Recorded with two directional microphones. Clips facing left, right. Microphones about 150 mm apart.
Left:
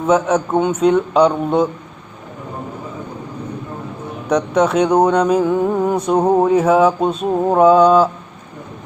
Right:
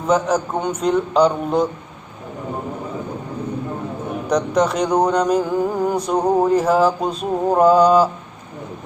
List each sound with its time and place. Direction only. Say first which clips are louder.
0.1 s speech: left 3 dB; 5° left (ahead or behind)
4.3 s speech: left 3 dB; 5° left (ahead or behind)
6.1 s a sound: left 3 dB; 25° left (ahead or behind)
6.4 s speech: left 3 dB; 5° left (ahead or behind)